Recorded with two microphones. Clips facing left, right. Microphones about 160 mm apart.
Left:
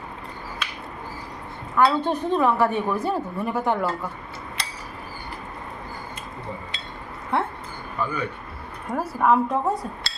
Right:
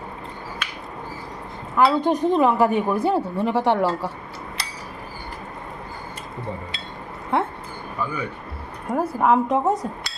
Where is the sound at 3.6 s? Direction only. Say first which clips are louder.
Right 3 dB; 85° right.